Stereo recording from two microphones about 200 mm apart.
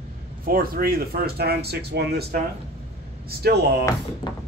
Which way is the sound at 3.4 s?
55° right (ahead or behind).